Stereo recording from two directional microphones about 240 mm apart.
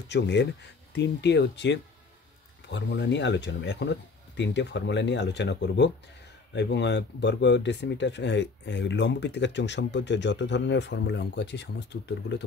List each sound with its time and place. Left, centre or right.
0.1 s speech: left